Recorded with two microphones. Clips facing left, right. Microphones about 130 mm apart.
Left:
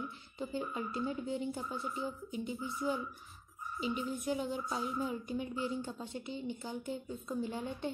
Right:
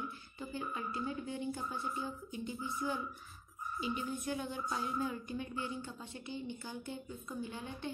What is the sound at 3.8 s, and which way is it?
Speech, 20° left (ahead or behind).